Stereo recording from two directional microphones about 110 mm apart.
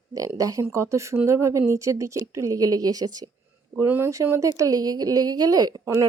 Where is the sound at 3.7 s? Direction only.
20° right (ahead or behind).